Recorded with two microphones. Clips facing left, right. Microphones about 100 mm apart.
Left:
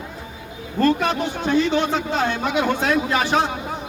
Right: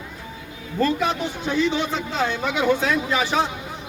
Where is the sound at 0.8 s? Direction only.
60° left (ahead or behind).